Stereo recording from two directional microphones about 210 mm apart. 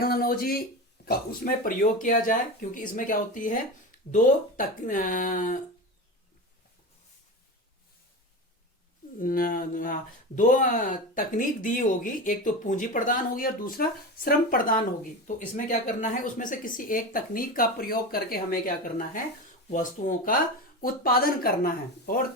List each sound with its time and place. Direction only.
0.0 s speech: 45° left (ahead or behind)
9.1 s speech: 40° left (ahead or behind)